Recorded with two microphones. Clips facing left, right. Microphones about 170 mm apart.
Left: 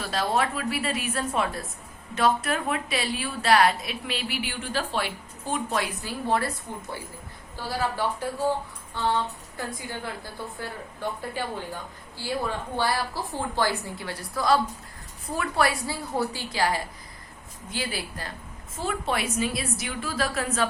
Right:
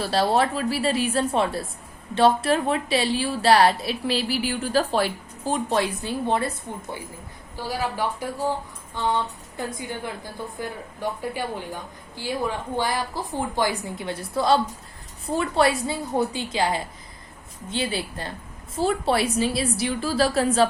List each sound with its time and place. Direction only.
0.0 s a woman's voice: 35° right (ahead or behind)
7.5 s speech: 15° right (ahead or behind)
9.6 s a woman's voice: 20° right (ahead or behind)
11.2 s a woman's voice: 15° right (ahead or behind); by 20.7 s 30° right (ahead or behind)